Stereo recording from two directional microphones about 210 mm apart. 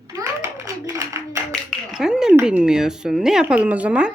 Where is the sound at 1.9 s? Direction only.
5° right (ahead or behind).